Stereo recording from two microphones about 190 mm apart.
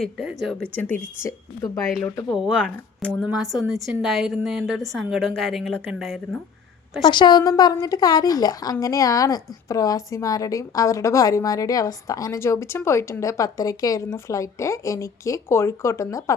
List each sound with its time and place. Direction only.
0.0 s a woman's voice: centre (ahead or behind)
2.4 s a woman's voice: 5° right (ahead or behind)
7.1 s a woman's voice: 25° left (ahead or behind)